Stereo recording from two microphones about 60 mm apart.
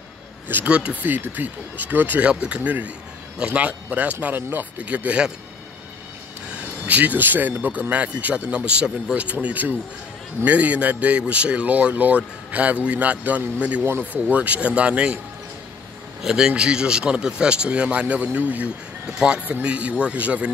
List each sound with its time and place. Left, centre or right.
0.7 s speech: right
1.0 s speech: right
2.2 s speech: centre
4.4 s speech: right
4.7 s speech: right
6.9 s speech: right
16.2 s speech: centre; by 18.7 s right
19.0 s speech: centre